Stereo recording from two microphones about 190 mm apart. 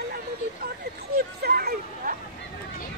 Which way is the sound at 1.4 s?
55° right (ahead or behind).